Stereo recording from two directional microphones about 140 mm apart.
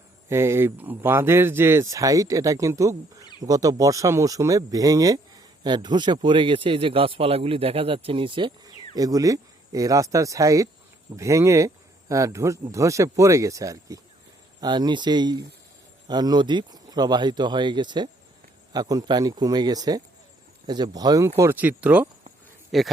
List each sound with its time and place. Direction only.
0.3 s speech: 20° right (ahead or behind)
22.7 s speech: centre (ahead or behind)